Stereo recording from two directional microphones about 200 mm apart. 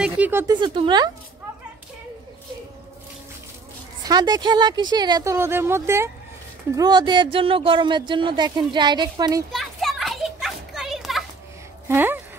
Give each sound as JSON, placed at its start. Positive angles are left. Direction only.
{"t": 0.0, "sound": "speech", "side_deg": -10}
{"t": 0.6, "sound": "speech", "side_deg": -25}
{"t": 4.0, "sound": "speech", "side_deg": -20}
{"t": 9.5, "sound": "children playing", "side_deg": 0}
{"t": 11.9, "sound": "speech", "side_deg": -10}